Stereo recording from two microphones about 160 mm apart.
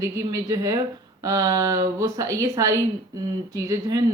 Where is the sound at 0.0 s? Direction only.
20° right (ahead or behind).